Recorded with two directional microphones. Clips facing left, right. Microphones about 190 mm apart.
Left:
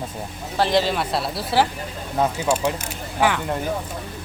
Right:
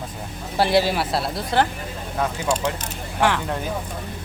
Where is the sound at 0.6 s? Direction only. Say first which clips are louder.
Right 1 dB; 10° right (ahead or behind).